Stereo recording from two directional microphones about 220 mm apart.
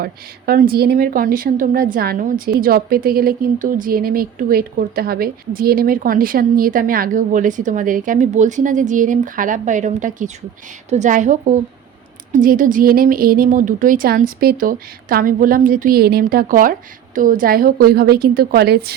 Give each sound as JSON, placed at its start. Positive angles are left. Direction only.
{"t": 0.0, "sound": "a woman's voice", "side_deg": -45}